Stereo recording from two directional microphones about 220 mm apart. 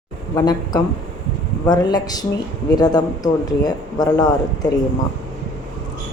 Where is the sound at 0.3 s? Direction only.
20° left (ahead or behind).